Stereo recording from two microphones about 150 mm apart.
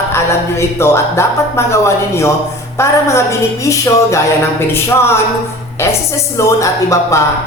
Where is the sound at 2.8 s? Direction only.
20° left (ahead or behind).